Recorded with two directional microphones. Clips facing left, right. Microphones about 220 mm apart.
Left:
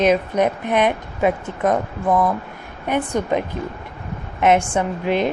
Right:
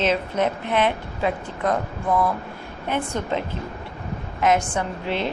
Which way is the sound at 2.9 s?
15° left (ahead or behind).